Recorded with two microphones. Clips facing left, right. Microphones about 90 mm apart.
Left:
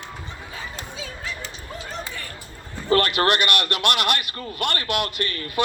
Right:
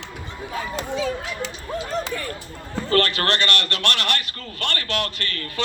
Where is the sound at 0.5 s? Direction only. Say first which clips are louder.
Right 11 dB; 65° right (ahead or behind).